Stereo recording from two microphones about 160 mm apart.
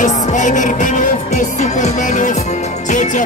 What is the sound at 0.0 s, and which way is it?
Music, 50° left (ahead or behind).